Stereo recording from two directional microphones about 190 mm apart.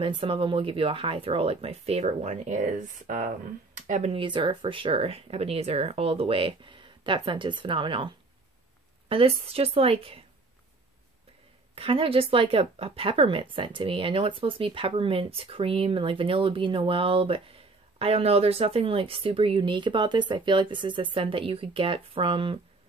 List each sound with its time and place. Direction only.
0.0 s speech: 30° right (ahead or behind)
9.1 s speech: 30° right (ahead or behind)
11.7 s speech: 30° right (ahead or behind)